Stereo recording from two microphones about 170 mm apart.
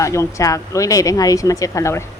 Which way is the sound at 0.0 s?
20° left (ahead or behind).